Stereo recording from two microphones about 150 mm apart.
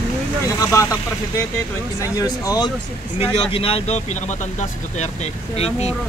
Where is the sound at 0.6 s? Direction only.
20° left (ahead or behind).